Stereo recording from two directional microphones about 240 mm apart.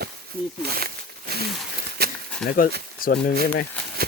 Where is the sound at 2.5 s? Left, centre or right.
Left.